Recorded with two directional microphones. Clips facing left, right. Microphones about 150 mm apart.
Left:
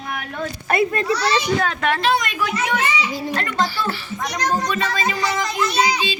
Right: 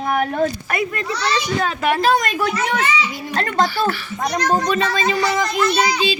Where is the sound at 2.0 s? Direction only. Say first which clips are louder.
Right 3 dB; 40° right (ahead or behind).